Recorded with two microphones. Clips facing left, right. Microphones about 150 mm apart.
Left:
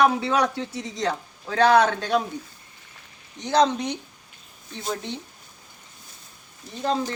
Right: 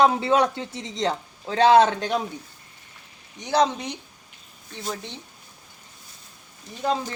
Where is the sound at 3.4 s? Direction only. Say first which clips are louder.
Left 1 dB; 5° right (ahead or behind).